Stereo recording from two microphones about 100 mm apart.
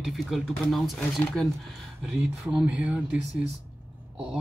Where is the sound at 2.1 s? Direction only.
15° right (ahead or behind).